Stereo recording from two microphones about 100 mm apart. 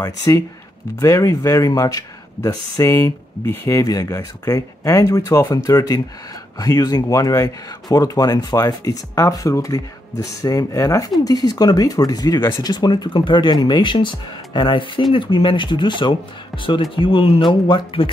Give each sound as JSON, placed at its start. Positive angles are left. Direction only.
{"t": 0.9, "sound": "speech", "side_deg": 35}